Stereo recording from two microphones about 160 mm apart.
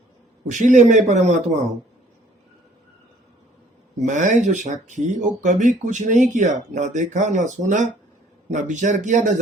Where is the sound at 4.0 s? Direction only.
50° right (ahead or behind).